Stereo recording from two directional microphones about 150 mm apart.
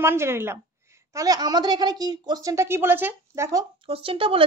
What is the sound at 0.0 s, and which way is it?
Speech, 15° right (ahead or behind).